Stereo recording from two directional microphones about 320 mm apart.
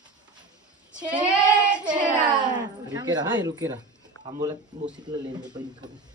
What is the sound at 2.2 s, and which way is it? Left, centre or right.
Speech, centre.